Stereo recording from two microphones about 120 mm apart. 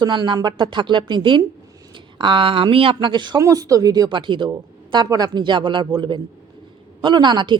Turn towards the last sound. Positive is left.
turn(degrees=-40)  # may be behind; listen again after turning